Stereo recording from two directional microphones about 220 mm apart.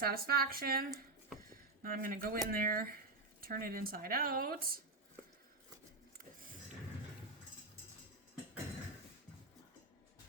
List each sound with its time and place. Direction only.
0.0 s speech: 45° right (ahead or behind)
6.1 s music: 40° right (ahead or behind)